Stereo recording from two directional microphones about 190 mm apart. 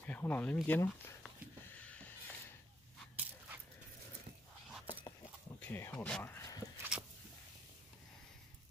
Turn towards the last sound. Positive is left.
turn(degrees=-15)  # may be behind; listen again after turning